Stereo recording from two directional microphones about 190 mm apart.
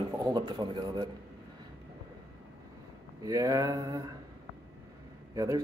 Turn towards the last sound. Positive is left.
turn(degrees=-20)  # may be behind; listen again after turning